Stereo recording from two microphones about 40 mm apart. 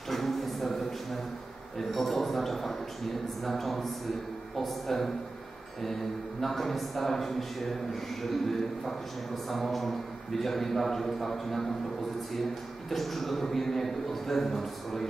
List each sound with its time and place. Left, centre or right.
0.1 s a sound: centre
1.8 s a man's voice: centre
12.9 s speech: centre